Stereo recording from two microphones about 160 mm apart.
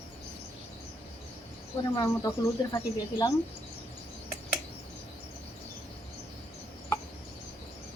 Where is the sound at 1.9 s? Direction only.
15° left (ahead or behind).